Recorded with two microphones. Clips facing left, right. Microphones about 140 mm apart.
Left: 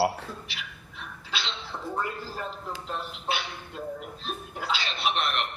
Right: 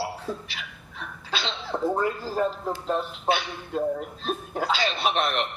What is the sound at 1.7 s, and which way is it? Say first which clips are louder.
Speech: right 12 dB; 75° right (ahead or behind).